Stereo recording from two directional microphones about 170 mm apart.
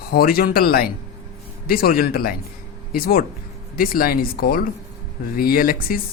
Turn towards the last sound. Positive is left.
turn(degrees=55)  # may be behind; listen again after turning